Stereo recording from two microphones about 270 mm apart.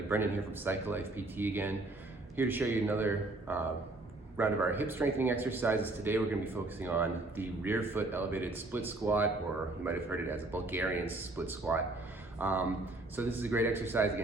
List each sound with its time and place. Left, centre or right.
0.1 s speech: centre